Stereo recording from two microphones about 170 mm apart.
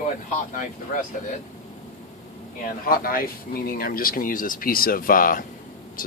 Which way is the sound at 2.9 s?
60° left (ahead or behind).